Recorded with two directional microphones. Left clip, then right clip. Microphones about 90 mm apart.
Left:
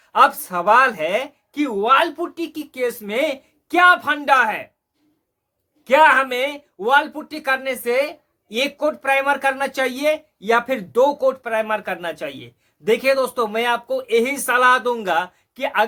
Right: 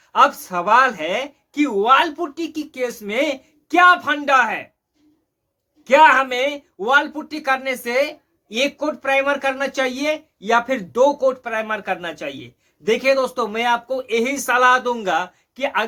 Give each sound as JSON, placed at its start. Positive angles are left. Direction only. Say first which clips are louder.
{"t": 0.0, "sound": "speech", "louder": "even", "side_deg": 40}
{"t": 5.8, "sound": "speech", "louder": "right 1 dB", "side_deg": 30}